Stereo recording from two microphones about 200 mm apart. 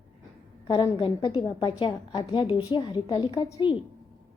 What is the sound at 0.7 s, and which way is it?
A woman's voice, 25° left (ahead or behind).